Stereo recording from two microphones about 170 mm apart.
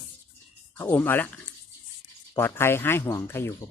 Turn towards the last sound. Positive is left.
turn(degrees=15)  # may be behind; listen again after turning